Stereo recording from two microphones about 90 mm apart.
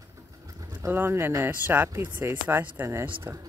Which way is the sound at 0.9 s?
25° right (ahead or behind).